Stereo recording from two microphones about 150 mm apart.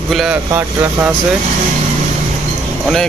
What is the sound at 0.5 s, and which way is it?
Speech, 15° right (ahead or behind).